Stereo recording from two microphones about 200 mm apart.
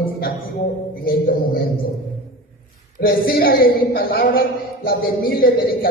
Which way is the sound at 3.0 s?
50° left (ahead or behind).